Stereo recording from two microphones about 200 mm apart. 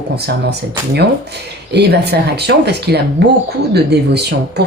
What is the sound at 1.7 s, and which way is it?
A woman's voice, 55° right (ahead or behind).